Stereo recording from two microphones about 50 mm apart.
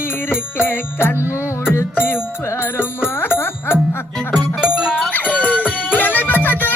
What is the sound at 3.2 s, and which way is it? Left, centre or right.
Music, left.